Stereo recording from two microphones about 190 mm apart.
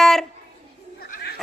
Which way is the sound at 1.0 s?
55° left (ahead or behind).